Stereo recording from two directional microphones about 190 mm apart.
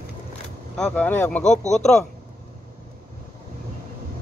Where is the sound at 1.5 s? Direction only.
40° left (ahead or behind).